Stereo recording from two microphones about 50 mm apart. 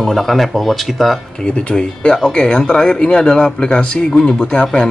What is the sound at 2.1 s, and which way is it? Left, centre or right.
Speech, centre.